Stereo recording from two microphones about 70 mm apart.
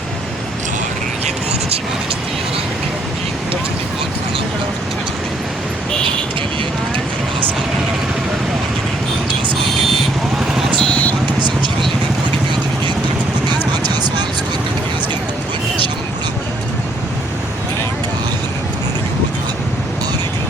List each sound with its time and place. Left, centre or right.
10.8 s vehicle: centre
13.8 s vehicle: right